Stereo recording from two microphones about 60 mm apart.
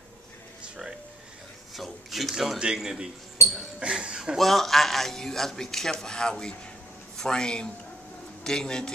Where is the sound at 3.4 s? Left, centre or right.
Left.